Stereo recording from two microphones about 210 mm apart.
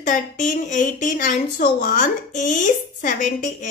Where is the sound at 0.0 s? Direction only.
35° left (ahead or behind).